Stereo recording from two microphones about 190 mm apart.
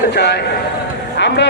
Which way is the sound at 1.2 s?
65° left (ahead or behind).